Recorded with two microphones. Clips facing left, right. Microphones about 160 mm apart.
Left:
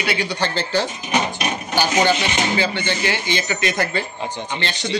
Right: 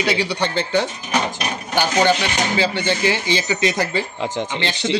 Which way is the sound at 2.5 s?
35° right (ahead or behind).